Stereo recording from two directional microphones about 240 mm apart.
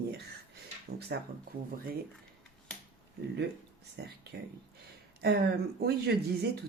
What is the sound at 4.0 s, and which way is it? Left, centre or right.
Speech, right.